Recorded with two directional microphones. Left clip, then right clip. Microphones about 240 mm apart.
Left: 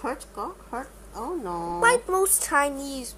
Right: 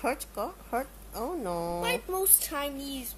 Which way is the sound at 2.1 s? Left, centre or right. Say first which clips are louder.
Left 7 dB; centre.